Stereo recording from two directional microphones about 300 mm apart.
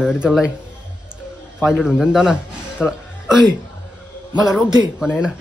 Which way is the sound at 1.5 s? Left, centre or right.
Centre.